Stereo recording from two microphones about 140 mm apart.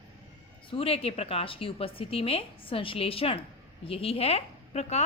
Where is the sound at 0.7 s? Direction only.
45° left (ahead or behind).